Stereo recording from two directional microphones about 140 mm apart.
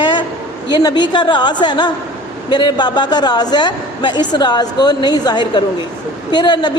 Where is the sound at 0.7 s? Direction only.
30° left (ahead or behind).